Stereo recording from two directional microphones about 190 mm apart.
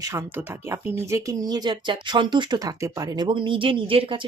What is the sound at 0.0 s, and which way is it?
Speech, 15° right (ahead or behind).